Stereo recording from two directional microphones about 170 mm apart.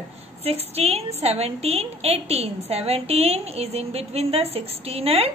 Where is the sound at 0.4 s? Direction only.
35° right (ahead or behind).